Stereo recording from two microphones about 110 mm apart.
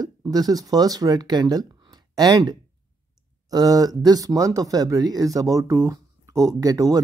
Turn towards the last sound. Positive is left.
turn(degrees=-30)  # may be behind; listen again after turning